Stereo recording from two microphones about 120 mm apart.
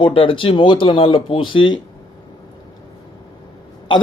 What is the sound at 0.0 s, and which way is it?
Speech, 50° left (ahead or behind).